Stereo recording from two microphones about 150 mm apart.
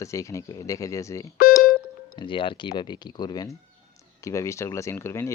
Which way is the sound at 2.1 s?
35° left (ahead or behind).